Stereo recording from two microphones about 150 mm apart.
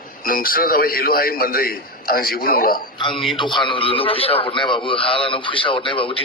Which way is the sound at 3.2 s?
35° left (ahead or behind).